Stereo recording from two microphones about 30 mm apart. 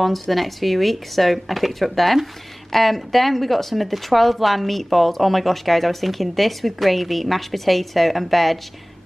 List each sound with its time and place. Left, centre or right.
0.0 s speech: centre